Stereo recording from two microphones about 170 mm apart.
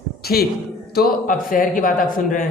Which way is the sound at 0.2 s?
65° left (ahead or behind).